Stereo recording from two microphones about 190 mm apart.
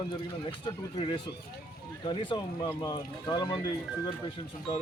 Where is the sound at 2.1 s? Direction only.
25° left (ahead or behind).